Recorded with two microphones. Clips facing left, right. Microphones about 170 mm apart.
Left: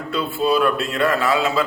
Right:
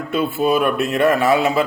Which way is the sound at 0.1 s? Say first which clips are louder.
Right 2 dB; 20° right (ahead or behind).